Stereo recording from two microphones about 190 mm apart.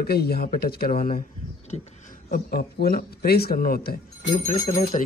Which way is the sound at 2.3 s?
50° left (ahead or behind).